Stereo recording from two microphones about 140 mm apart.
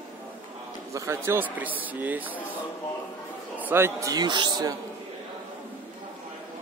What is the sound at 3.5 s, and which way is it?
A man's voice, 15° right (ahead or behind).